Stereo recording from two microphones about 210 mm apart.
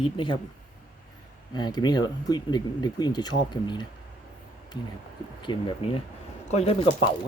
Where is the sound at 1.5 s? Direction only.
20° left (ahead or behind).